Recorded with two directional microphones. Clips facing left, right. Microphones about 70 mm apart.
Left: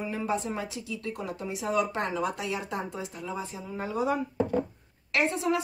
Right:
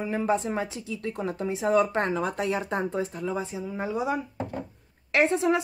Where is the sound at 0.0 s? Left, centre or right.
Right.